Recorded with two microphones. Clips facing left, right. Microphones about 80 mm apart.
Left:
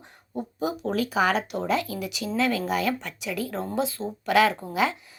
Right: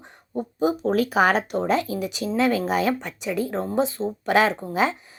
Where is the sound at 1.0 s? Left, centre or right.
Right.